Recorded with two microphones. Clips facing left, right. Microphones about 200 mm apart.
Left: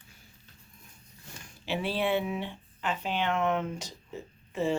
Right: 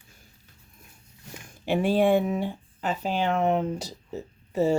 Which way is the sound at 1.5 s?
50° right (ahead or behind).